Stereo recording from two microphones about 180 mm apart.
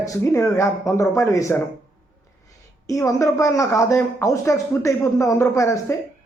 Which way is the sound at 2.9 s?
15° left (ahead or behind).